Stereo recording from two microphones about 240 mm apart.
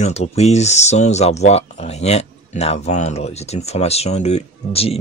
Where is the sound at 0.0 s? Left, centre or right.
Left.